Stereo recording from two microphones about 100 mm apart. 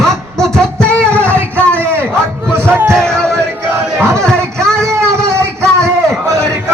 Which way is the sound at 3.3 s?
25° right (ahead or behind).